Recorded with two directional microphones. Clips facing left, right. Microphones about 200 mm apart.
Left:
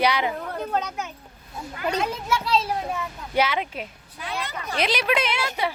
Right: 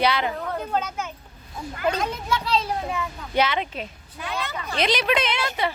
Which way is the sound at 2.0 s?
5° left (ahead or behind).